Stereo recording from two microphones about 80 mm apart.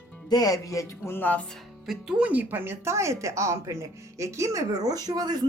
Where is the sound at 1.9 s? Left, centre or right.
Centre.